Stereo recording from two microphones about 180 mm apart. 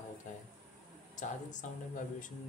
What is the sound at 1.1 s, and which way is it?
Speech, 45° left (ahead or behind).